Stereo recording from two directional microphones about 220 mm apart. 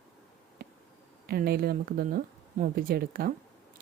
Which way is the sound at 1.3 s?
45° right (ahead or behind).